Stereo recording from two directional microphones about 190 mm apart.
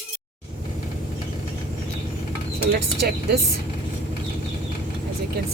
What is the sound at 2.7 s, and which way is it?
Speech, 60° right (ahead or behind).